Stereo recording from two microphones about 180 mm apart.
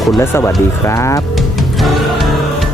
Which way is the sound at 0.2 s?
15° left (ahead or behind).